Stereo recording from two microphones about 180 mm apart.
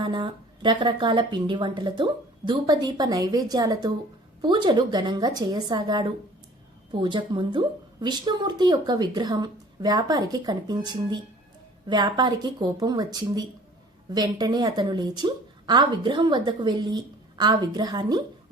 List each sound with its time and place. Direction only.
0.0 s a woman's voice: 25° right (ahead or behind)